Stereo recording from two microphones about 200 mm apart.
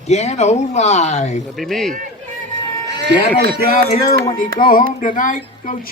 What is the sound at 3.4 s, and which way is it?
Speech, 50° right (ahead or behind).